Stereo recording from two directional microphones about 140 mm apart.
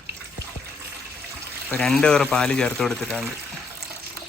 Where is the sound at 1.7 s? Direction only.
5° left (ahead or behind).